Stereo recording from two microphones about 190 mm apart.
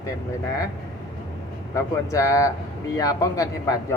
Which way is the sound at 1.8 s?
15° left (ahead or behind).